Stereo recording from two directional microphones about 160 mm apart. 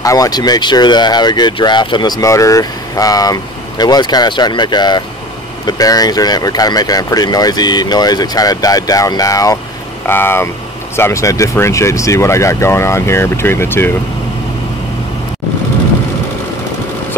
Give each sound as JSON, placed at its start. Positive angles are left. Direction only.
{"t": 0.0, "sound": "speech", "side_deg": 20}